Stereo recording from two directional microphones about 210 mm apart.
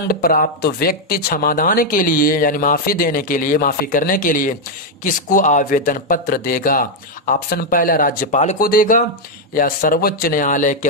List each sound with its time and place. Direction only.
0.1 s speech: 45° left (ahead or behind)